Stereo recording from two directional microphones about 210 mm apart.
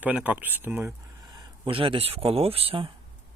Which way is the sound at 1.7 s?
25° right (ahead or behind).